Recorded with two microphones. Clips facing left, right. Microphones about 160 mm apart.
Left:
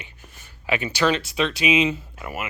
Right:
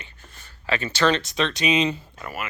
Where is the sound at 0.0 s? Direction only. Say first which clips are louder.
Left 1 dB; 15° left (ahead or behind).